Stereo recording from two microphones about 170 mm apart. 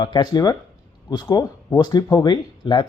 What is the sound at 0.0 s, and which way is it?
Speech, 25° left (ahead or behind).